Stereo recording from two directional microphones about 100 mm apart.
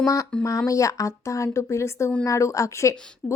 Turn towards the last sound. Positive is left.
turn(degrees=30)  # may be behind; listen again after turning